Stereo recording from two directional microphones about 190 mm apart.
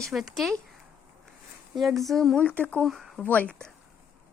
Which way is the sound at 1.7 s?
Centre (ahead or behind).